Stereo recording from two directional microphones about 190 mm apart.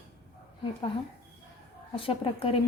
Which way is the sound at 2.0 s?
30° left (ahead or behind).